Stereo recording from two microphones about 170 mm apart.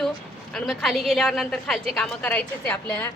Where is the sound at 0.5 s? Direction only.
Centre (ahead or behind).